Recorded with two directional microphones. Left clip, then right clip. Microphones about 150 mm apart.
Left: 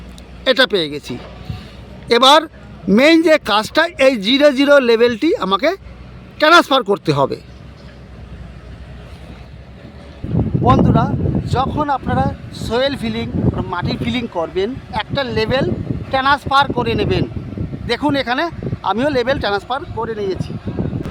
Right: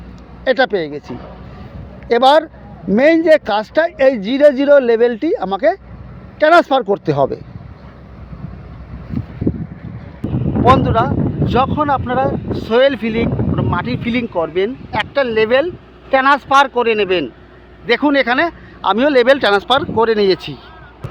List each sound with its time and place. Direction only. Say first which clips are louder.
0.4 s speech: left 1 dB; 30° left (ahead or behind)
10.8 s speech: right 1 dB; 5° right (ahead or behind)
20.0 s speech: right 9 dB; 30° right (ahead or behind)